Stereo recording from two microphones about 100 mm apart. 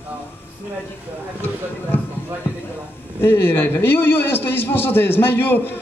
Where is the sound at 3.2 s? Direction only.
20° left (ahead or behind).